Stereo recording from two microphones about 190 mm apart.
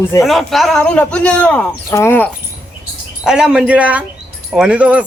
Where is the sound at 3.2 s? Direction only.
5° right (ahead or behind).